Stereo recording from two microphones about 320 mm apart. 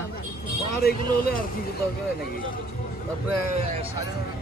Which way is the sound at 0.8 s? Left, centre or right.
Left.